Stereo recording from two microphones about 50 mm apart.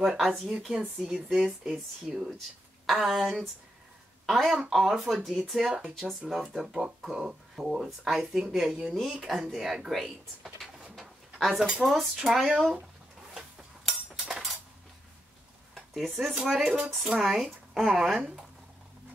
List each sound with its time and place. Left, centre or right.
0.2 s speech: centre
1.3 s speech: centre
2.9 s speech: centre
9.8 s pigeon: centre
11.8 s speech: centre
14.1 s a sound: centre
15.7 s speech: centre
16.6 s speech: centre
17.0 s speech: centre